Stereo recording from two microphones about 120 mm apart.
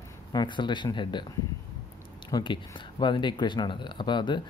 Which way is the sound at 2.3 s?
40° left (ahead or behind).